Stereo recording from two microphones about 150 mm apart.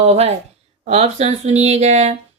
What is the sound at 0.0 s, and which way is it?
Speech, 45° right (ahead or behind).